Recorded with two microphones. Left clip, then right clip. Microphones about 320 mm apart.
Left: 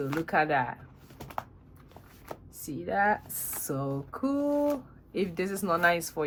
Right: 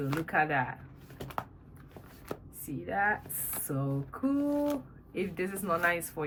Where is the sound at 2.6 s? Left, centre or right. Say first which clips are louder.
Left 3 dB; centre.